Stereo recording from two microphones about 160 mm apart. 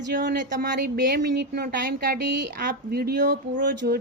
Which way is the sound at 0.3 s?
60° right (ahead or behind).